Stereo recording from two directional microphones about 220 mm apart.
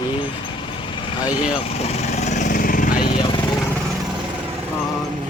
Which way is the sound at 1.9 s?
30° left (ahead or behind).